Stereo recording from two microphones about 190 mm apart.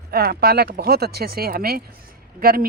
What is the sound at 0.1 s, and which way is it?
Speech, 55° right (ahead or behind).